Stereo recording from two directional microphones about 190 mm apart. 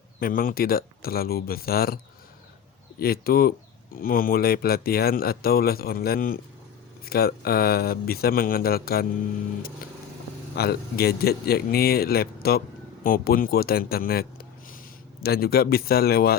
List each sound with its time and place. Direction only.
0.2 s speech: 50° left (ahead or behind)
3.0 s speech: 50° left (ahead or behind)
10.5 s speech: 55° left (ahead or behind)